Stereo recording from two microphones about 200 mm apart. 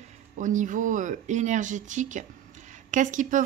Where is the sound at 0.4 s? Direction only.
40° right (ahead or behind).